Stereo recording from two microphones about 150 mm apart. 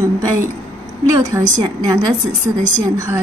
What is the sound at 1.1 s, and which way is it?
A woman's voice, 25° right (ahead or behind).